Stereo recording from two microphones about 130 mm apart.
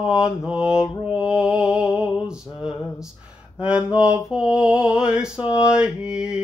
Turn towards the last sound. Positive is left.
turn(degrees=-5)  # may be behind; listen again after turning